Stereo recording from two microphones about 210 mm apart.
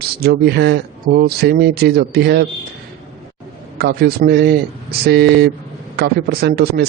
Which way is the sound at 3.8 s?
50° right (ahead or behind).